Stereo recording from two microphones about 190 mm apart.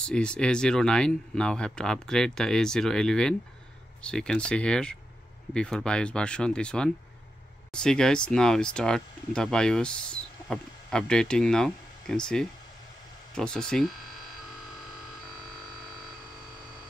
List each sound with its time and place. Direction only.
0.0 s speech: 5° left (ahead or behind)